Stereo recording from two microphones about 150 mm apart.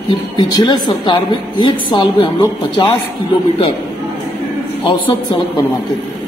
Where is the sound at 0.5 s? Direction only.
25° left (ahead or behind).